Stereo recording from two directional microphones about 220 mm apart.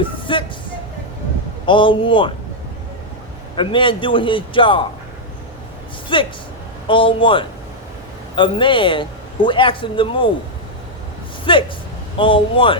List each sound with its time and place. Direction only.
0.0 s speech: 20° left (ahead or behind)
1.6 s a man's voice: 20° left (ahead or behind)
3.5 s a man's voice: 20° left (ahead or behind)
6.1 s a man's voice: 25° left (ahead or behind)
11.5 s a man's voice: 25° left (ahead or behind)